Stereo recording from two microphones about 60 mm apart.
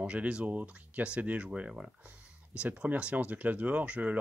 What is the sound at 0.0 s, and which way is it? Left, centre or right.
Speech, centre.